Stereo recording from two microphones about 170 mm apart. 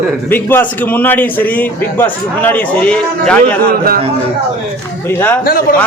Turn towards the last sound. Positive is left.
turn(degrees=60)  # may be behind; listen again after turning